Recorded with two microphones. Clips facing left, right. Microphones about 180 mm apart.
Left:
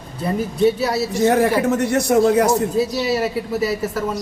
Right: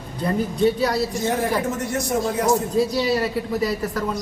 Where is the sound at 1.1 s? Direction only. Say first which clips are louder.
Left 6 dB; 70° left (ahead or behind).